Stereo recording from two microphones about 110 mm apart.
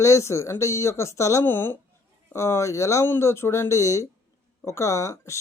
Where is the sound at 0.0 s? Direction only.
30° left (ahead or behind).